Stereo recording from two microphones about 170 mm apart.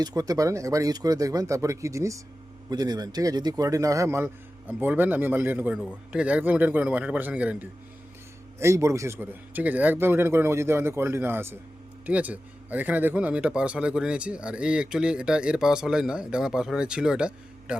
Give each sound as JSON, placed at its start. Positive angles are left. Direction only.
{"t": 0.0, "sound": "a man's voice", "side_deg": -20}